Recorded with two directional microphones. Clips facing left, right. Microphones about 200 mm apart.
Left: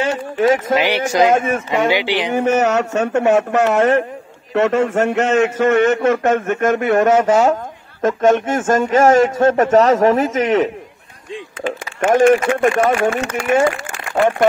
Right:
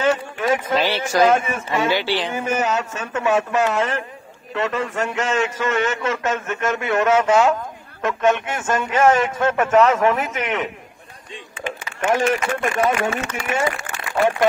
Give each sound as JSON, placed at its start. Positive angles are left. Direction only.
{"t": 0.7, "sound": "speech", "side_deg": 15}
{"t": 2.3, "sound": "a man's voice", "side_deg": 65}
{"t": 12.0, "sound": "a man's voice", "side_deg": 50}